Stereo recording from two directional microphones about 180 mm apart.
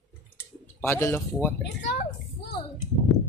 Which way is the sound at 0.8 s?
15° left (ahead or behind).